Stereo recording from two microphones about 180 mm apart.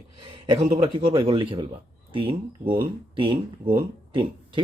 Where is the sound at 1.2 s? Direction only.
30° right (ahead or behind).